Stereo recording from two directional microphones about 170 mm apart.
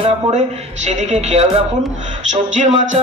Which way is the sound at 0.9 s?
40° right (ahead or behind).